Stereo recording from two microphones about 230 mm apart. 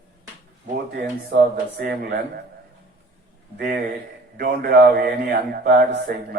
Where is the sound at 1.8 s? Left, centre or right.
Right.